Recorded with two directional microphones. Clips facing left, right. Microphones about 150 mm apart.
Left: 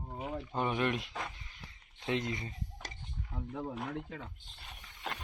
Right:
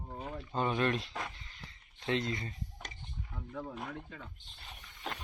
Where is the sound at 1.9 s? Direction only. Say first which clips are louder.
Right 1 dB; 20° left (ahead or behind).